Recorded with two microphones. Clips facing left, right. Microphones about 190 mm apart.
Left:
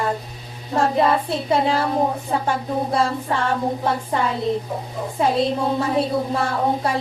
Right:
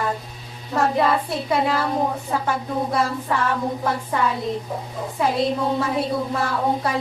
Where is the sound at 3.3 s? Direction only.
30° left (ahead or behind).